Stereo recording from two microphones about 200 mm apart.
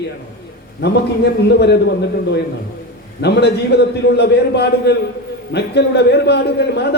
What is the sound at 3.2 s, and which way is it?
A man's voice, 55° left (ahead or behind).